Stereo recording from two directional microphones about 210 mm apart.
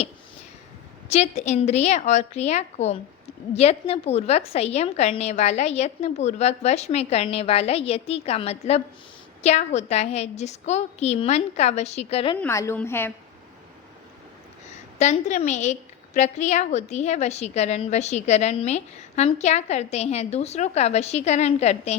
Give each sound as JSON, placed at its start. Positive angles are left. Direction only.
{"t": 1.1, "sound": "a woman's voice", "side_deg": 30}
{"t": 12.4, "sound": "a woman's voice", "side_deg": 15}
{"t": 14.9, "sound": "a woman's voice", "side_deg": 35}